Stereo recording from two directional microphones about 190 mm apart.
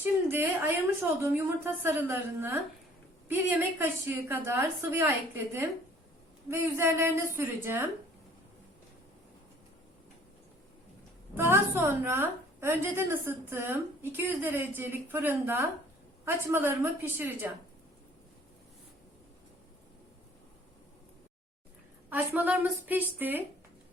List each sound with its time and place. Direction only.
0.0 s a woman's voice: 10° right (ahead or behind)
11.3 s a woman's voice: 10° right (ahead or behind)
22.1 s a woman's voice: 10° right (ahead or behind)